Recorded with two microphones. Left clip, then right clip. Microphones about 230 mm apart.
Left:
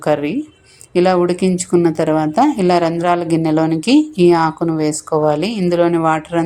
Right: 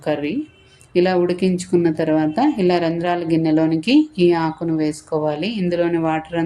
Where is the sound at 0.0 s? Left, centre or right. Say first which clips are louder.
Left 5 dB; centre.